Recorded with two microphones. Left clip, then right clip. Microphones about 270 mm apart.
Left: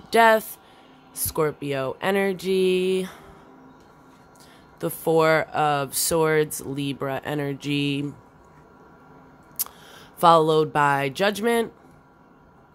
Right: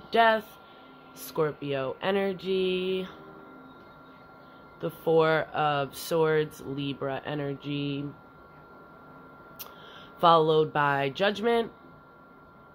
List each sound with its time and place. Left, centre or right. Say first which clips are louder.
0.1 s speech: left 6 dB; left
4.7 s speech: left 3 dB; left
9.6 s speech: left 8 dB; left